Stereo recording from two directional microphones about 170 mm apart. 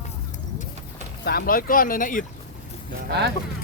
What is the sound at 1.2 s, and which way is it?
Speech, 65° left (ahead or behind).